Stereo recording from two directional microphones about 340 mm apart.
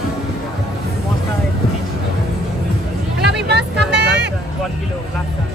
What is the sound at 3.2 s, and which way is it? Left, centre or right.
Vehicle, right.